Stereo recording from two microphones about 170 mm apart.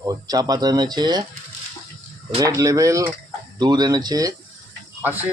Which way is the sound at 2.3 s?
20° right (ahead or behind).